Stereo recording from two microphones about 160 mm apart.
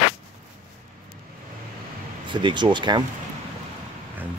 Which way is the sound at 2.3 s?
30° right (ahead or behind).